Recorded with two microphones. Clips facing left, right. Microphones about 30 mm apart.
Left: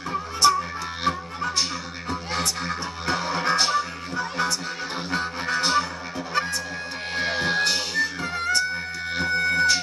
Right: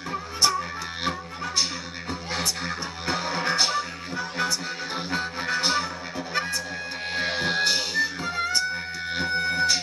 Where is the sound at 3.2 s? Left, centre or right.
Centre.